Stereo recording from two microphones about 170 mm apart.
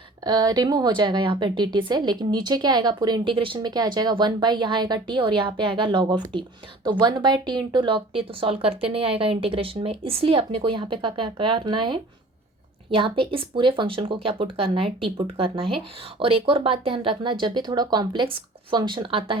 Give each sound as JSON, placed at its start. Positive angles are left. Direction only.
{"t": 0.3, "sound": "a woman's voice", "side_deg": -25}